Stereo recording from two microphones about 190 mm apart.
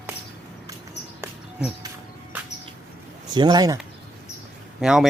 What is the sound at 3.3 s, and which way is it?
Speech, 20° right (ahead or behind).